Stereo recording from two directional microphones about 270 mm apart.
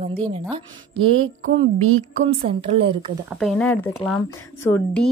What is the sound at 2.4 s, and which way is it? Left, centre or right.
Speech, centre.